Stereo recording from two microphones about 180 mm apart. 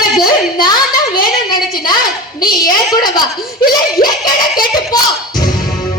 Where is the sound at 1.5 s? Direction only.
25° left (ahead or behind).